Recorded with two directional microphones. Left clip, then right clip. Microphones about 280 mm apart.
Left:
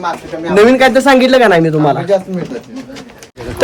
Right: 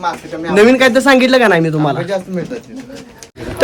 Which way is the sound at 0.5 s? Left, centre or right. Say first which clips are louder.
Left 2 dB; centre.